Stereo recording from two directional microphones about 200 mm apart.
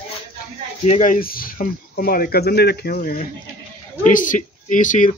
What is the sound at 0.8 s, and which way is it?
Speech, 40° left (ahead or behind).